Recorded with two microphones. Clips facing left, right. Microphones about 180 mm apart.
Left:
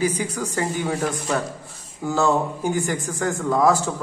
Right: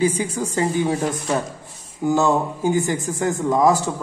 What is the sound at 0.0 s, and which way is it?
A man's voice, 25° right (ahead or behind).